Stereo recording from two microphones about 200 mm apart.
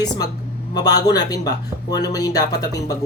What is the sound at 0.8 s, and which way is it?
Speech, 20° left (ahead or behind).